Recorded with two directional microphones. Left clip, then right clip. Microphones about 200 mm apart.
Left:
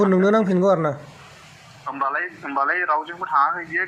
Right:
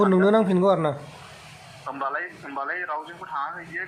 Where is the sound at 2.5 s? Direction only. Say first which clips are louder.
Left 9 dB; 40° left (ahead or behind).